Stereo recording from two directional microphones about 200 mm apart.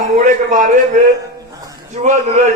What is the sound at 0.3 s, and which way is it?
Speech, 40° right (ahead or behind).